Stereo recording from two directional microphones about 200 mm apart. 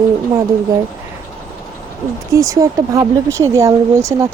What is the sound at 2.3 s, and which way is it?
Speech, 15° right (ahead or behind).